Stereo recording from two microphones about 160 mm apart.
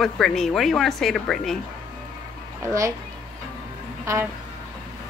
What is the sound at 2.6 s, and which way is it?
Speech, 20° right (ahead or behind).